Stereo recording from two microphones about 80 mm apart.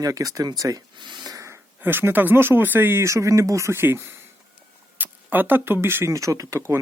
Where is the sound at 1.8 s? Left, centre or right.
Right.